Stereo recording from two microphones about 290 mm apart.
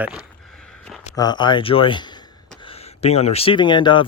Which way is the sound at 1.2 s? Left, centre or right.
Centre.